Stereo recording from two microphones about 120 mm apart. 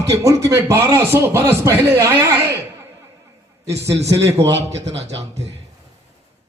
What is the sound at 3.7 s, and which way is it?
Speech, 25° right (ahead or behind).